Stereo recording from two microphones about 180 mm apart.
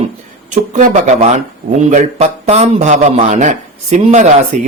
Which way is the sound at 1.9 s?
40° right (ahead or behind).